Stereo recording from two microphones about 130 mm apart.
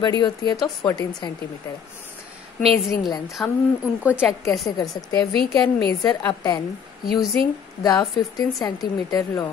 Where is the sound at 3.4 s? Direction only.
5° left (ahead or behind).